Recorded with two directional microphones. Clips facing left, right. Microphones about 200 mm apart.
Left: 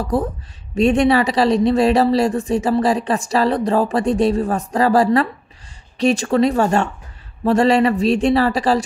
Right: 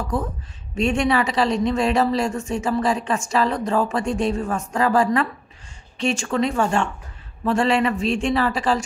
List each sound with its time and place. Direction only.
0.0 s speech: 35° left (ahead or behind)